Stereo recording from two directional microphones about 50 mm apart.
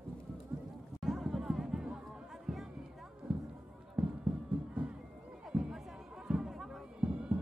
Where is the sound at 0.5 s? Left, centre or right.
Right.